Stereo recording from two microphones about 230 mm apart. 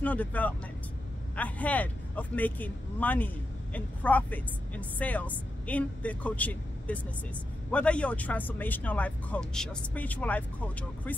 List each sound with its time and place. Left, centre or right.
0.0 s speech: centre